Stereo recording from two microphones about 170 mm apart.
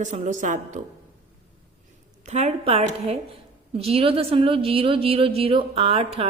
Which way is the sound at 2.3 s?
40° right (ahead or behind).